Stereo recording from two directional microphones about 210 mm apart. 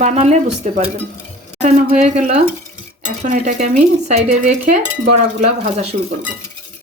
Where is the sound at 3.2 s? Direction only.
40° right (ahead or behind).